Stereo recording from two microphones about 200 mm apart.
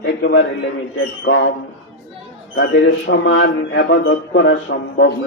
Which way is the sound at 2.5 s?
65° left (ahead or behind).